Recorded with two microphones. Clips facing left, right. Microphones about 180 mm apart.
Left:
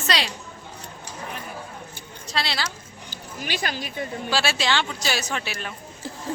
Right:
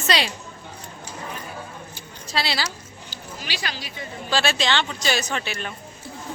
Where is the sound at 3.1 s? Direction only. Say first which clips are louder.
Left 3 dB; 50° left (ahead or behind).